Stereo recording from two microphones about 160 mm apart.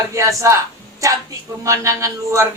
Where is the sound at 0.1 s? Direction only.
20° right (ahead or behind).